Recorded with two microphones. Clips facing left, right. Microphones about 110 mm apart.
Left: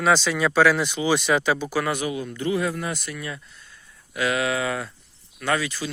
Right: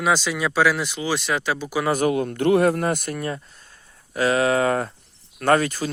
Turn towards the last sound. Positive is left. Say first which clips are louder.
# right 6 dB
turn(degrees=-45)  # may be behind; listen again after turning